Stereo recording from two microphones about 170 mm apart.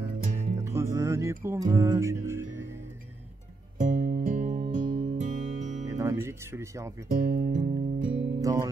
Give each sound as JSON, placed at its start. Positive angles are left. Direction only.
{"t": 0.4, "sound": "music", "side_deg": -40}
{"t": 0.7, "sound": "music", "side_deg": -15}
{"t": 3.7, "sound": "music", "side_deg": -50}
{"t": 5.9, "sound": "speech", "side_deg": -20}
{"t": 7.1, "sound": "music", "side_deg": -55}
{"t": 8.4, "sound": "speech", "side_deg": -20}